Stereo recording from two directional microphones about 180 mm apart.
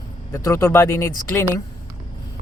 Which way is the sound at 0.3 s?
15° left (ahead or behind).